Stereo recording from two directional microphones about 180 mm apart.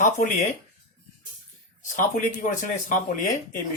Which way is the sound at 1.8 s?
45° left (ahead or behind).